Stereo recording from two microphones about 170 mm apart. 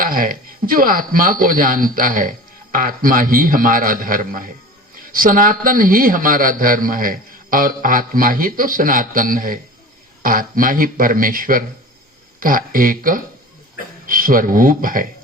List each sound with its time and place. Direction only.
0.0 s a man's voice: 55° right (ahead or behind)